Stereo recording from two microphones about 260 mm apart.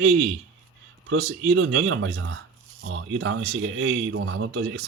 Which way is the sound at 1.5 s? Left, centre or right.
Right.